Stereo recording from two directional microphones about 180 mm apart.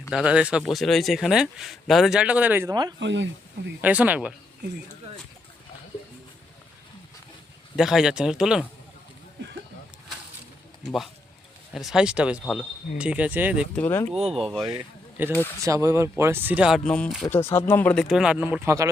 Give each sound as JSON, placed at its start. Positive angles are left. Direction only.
{"t": 0.1, "sound": "speech", "side_deg": -5}
{"t": 3.0, "sound": "speech", "side_deg": -85}
{"t": 3.8, "sound": "speech", "side_deg": -10}
{"t": 7.8, "sound": "speech", "side_deg": -5}
{"t": 11.7, "sound": "speech", "side_deg": 0}
{"t": 13.7, "sound": "speech", "side_deg": 10}
{"t": 14.3, "sound": "speech", "side_deg": 0}
{"t": 17.2, "sound": "speech", "side_deg": 15}